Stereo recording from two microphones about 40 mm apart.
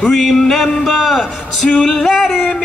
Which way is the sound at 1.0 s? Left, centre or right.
Centre.